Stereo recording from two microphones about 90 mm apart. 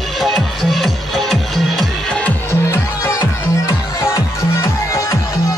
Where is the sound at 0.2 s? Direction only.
Centre (ahead or behind).